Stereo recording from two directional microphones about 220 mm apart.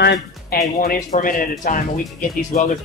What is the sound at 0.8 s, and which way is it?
Speech, 40° left (ahead or behind).